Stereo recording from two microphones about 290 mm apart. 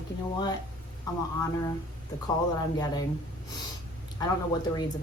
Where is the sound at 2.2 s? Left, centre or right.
Centre.